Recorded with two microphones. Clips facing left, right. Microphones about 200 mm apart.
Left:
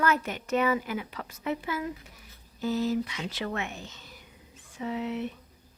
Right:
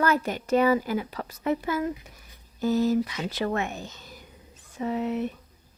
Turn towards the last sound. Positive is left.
turn(degrees=-40)  # may be behind; listen again after turning